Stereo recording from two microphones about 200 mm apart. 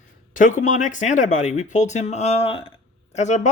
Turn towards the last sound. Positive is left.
turn(degrees=35)  # may be behind; listen again after turning